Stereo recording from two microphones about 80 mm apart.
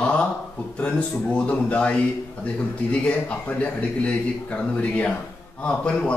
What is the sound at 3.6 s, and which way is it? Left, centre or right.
A man's voice, centre.